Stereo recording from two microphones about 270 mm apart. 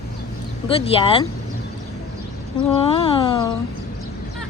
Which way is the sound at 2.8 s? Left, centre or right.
Centre.